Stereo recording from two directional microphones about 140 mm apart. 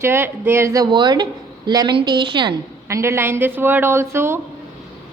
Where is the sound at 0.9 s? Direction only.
30° right (ahead or behind).